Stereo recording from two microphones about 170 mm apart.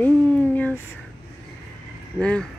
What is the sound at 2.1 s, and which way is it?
Speech, 5° left (ahead or behind).